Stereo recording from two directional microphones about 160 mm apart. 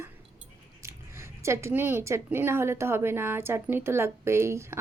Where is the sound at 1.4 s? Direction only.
15° right (ahead or behind).